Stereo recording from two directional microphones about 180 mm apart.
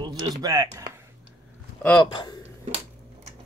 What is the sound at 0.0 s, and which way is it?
Speech, 20° right (ahead or behind).